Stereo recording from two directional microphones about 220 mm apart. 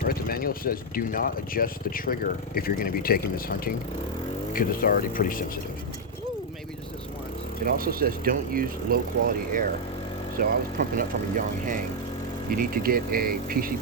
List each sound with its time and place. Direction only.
0.0 s speech: 40° left (ahead or behind)
7.6 s speech: 40° right (ahead or behind)